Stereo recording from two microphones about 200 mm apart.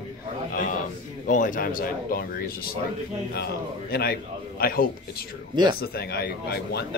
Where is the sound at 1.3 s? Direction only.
40° left (ahead or behind).